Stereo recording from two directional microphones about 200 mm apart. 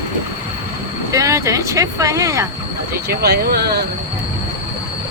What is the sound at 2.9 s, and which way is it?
Speech, 55° right (ahead or behind).